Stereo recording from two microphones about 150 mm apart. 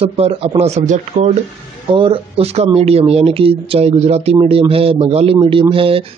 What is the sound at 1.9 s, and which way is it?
Speech, 35° right (ahead or behind).